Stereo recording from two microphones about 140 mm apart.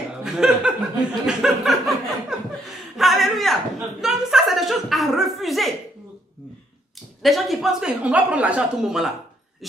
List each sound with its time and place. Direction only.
0.2 s speech: 5° right (ahead or behind)
1.2 s chuckle: 5° right (ahead or behind)
3.0 s a sound: centre (ahead or behind)
4.0 s chuckle: centre (ahead or behind)
7.2 s speech: centre (ahead or behind)